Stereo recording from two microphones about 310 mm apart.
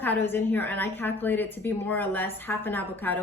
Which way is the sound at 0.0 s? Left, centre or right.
Centre.